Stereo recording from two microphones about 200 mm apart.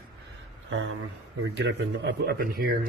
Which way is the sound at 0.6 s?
75° right (ahead or behind).